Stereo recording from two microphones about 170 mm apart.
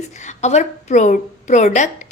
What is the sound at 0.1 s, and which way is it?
A woman's voice, 45° left (ahead or behind).